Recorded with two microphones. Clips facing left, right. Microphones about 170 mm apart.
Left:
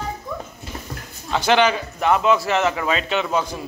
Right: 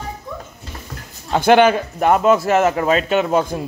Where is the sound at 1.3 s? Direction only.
50° right (ahead or behind).